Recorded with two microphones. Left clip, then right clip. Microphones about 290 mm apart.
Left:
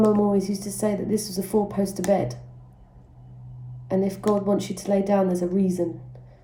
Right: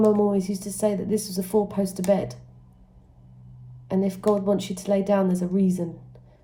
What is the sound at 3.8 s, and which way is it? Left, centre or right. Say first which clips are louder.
Speech: even; centre.